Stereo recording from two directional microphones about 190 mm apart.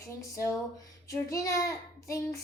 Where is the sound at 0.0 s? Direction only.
15° left (ahead or behind).